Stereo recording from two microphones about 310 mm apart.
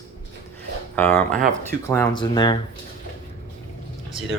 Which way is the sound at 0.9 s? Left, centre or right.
Centre.